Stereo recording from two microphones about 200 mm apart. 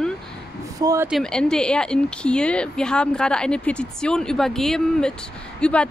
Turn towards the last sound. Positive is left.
turn(degrees=5)  # may be behind; listen again after turning